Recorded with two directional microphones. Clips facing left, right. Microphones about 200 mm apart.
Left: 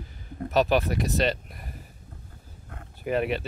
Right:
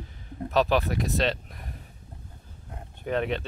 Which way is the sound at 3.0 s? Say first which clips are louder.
Left 1 dB; 5° left (ahead or behind).